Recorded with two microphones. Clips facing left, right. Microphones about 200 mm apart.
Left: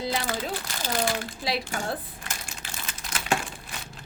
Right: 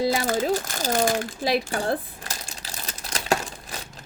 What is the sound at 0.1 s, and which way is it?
Crumpling, 45° right (ahead or behind).